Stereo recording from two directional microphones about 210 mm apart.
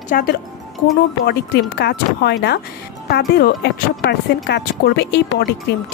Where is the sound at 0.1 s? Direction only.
45° left (ahead or behind).